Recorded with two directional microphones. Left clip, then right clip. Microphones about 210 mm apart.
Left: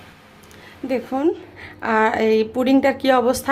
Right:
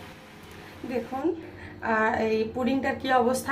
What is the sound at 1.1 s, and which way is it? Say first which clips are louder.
A woman's voice: left 8 dB; 50° left (ahead or behind).